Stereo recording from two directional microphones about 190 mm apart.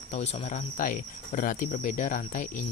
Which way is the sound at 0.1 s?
35° left (ahead or behind).